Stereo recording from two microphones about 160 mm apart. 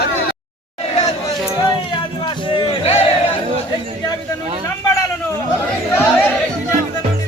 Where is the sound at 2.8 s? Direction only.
35° left (ahead or behind).